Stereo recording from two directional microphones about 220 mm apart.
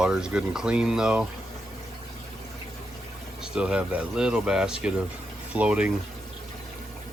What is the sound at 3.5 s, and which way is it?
Speech, 5° right (ahead or behind).